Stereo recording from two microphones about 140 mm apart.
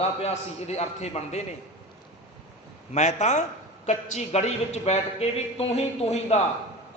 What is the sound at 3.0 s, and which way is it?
A man's voice, 55° left (ahead or behind).